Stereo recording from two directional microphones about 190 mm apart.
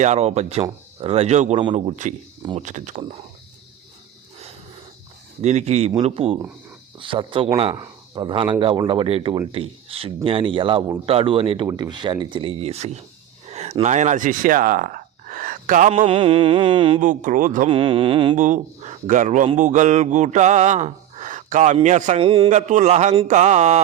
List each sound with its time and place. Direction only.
0.0 s a man's voice: 35° right (ahead or behind)
5.4 s a man's voice: 35° right (ahead or behind)
15.9 s a man's voice: 30° right (ahead or behind)
17.0 s a man's voice: 40° right (ahead or behind)
17.7 s a man's voice: 30° right (ahead or behind)
18.3 s a man's voice: 40° right (ahead or behind)
19.5 s gasp: 40° right (ahead or behind)
21.8 s a man's voice: 40° right (ahead or behind)
22.4 s a man's voice: 40° right (ahead or behind)